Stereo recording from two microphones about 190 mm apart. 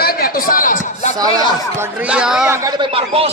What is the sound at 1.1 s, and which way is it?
A man's voice, 20° right (ahead or behind).